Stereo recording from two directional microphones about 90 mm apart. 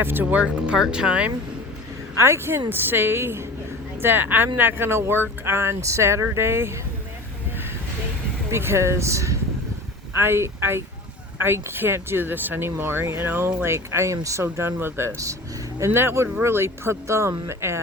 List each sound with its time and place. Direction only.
0.0 s speech: 20° right (ahead or behind)
2.1 s speech: 30° right (ahead or behind)
8.4 s speech: 30° right (ahead or behind)